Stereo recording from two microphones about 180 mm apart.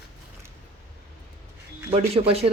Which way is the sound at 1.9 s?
35° right (ahead or behind).